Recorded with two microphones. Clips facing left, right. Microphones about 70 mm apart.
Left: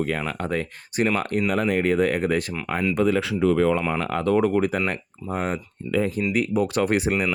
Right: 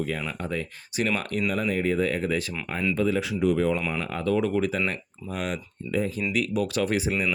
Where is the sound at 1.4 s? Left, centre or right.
Left.